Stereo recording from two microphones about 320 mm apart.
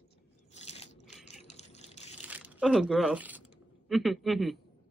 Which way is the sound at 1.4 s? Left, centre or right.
Centre.